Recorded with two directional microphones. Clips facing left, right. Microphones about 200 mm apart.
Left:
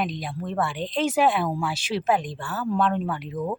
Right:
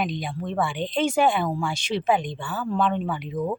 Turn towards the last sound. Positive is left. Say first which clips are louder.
# right 1 dB
turn(degrees=0)  # may be behind; listen again after turning